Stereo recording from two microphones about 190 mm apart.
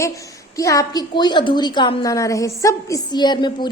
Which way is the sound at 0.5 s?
15° left (ahead or behind).